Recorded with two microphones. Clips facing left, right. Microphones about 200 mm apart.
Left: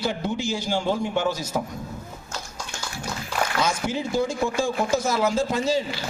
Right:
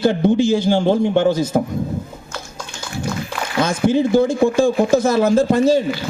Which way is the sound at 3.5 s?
55° right (ahead or behind).